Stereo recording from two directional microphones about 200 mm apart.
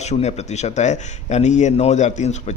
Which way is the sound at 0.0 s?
35° left (ahead or behind).